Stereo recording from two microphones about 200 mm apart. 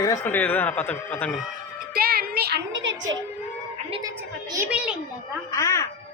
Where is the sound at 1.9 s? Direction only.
50° right (ahead or behind); by 2.9 s 65° right (ahead or behind).